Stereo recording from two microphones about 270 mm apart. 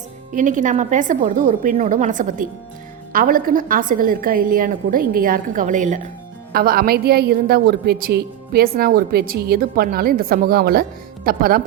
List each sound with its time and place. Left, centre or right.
0.3 s a woman's voice: right